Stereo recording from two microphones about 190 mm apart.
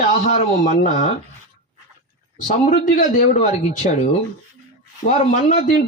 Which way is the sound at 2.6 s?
40° left (ahead or behind).